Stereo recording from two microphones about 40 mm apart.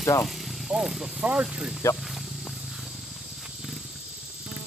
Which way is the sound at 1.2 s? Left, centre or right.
Right.